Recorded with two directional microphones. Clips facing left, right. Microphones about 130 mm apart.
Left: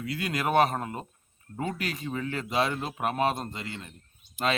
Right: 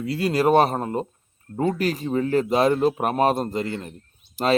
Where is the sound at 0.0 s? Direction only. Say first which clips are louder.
Right 9 dB; 30° right (ahead or behind).